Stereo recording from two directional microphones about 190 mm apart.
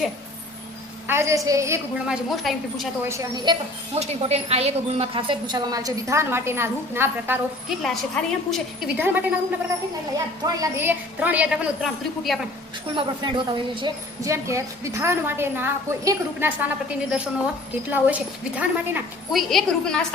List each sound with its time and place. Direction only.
1.0 s speech: 15° right (ahead or behind)
2.0 s a woman's voice: centre (ahead or behind)
3.0 s a woman's voice: 15° right (ahead or behind)
4.0 s a woman's voice: 35° right (ahead or behind); by 7.3 s 10° right (ahead or behind)
7.8 s a woman's voice: centre (ahead or behind)
9.0 s speech: 10° right (ahead or behind)
13.0 s speech: 25° right (ahead or behind); by 20.1 s 5° left (ahead or behind)